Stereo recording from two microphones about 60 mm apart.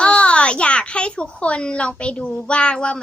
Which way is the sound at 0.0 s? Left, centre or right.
Centre.